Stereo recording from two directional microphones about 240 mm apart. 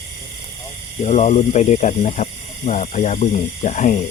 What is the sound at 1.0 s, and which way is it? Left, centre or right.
Speech, left.